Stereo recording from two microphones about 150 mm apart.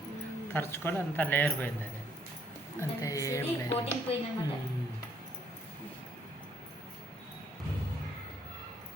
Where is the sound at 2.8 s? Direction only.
20° left (ahead or behind).